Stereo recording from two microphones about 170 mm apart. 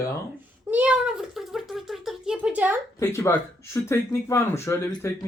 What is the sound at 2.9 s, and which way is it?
Speech, 20° left (ahead or behind).